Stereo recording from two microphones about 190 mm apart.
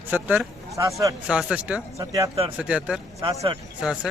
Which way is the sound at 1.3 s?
5° right (ahead or behind).